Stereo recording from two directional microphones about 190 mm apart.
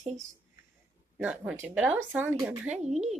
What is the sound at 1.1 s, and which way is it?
Speech, 5° right (ahead or behind).